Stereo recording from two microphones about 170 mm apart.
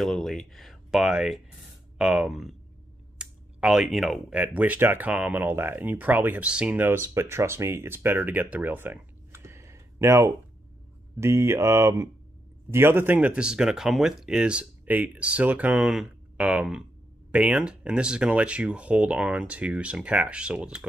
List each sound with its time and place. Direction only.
0.0 s speech: centre (ahead or behind)